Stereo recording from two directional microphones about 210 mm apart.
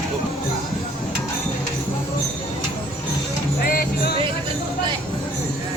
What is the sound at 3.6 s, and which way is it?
Music, 45° left (ahead or behind).